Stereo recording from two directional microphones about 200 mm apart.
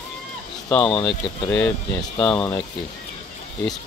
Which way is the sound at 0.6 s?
5° left (ahead or behind).